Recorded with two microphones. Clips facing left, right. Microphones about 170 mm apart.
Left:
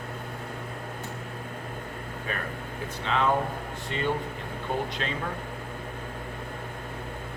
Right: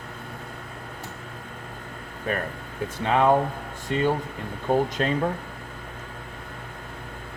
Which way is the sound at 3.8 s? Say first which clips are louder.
Right 6 dB; 45° right (ahead or behind).